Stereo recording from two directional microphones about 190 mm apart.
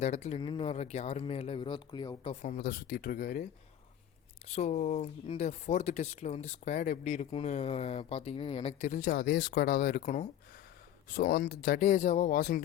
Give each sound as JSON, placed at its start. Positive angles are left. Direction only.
{"t": 0.0, "sound": "speech", "side_deg": 35}
{"t": 2.3, "sound": "speech", "side_deg": 40}
{"t": 2.6, "sound": "speech", "side_deg": 50}
{"t": 4.4, "sound": "speech", "side_deg": 35}
{"t": 8.9, "sound": "speech", "side_deg": 45}